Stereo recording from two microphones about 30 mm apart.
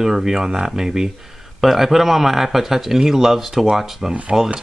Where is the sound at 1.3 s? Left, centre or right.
Centre.